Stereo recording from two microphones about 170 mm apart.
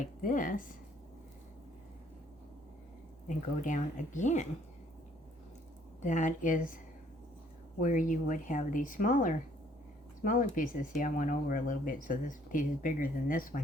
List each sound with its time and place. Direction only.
0.0 s speech: 50° left (ahead or behind)
3.2 s speech: 50° left (ahead or behind)
6.0 s speech: 45° left (ahead or behind)
7.8 s speech: 50° left (ahead or behind)